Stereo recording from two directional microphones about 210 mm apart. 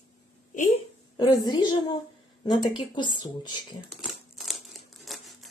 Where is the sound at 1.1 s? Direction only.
20° left (ahead or behind).